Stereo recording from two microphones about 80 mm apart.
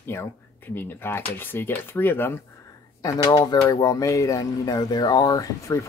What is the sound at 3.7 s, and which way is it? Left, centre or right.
Speech, left.